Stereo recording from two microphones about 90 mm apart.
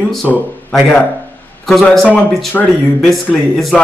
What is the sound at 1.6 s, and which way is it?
Speech, 5° left (ahead or behind).